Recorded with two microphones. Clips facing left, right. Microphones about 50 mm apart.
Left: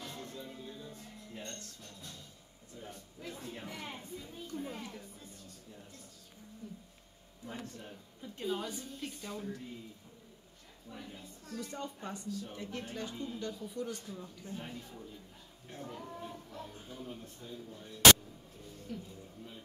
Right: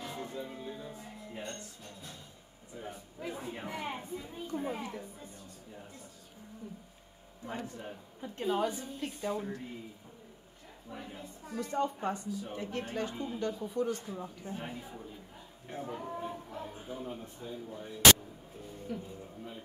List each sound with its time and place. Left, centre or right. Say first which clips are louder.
0.0 s music: right 5 dB; centre
2.7 s speech: right 5 dB; centre
7.6 s speech: right 4 dB; centre
10.9 s speech: right 3 dB; centre